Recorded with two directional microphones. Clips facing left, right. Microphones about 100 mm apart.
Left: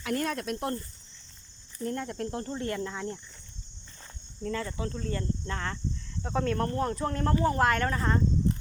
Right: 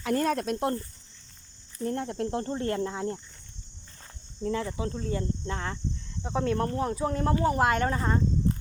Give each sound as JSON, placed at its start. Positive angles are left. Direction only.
{"t": 0.0, "sound": "speech", "side_deg": -30}
{"t": 0.5, "sound": "speech", "side_deg": -25}
{"t": 1.8, "sound": "speech", "side_deg": -25}
{"t": 4.4, "sound": "speech", "side_deg": -15}